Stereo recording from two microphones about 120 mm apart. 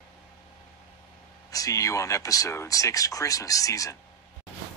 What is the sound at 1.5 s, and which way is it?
Speech, 30° left (ahead or behind).